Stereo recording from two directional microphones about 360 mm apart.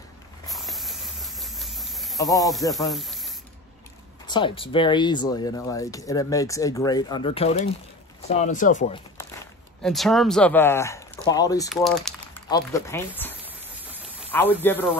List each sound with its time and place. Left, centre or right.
0.5 s snake: centre
4.3 s speech: centre
9.8 s speech: centre
14.3 s speech: centre